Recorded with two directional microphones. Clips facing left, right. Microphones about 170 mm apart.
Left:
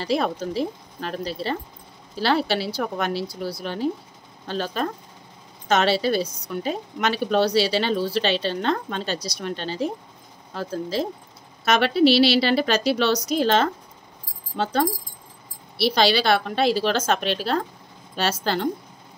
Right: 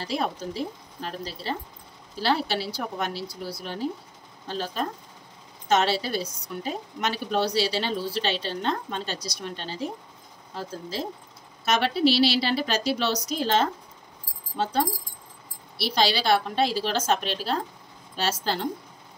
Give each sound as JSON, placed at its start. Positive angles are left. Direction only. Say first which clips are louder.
{"t": 0.0, "sound": "a woman's voice", "louder": "left 5 dB", "side_deg": 75}